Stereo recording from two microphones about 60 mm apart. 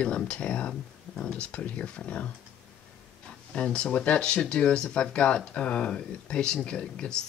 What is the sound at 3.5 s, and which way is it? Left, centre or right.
Speech, centre.